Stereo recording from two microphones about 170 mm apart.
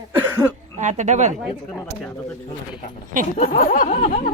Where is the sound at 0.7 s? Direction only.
45° right (ahead or behind).